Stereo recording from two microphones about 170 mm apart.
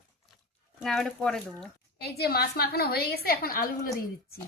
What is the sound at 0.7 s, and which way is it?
Speech, centre (ahead or behind).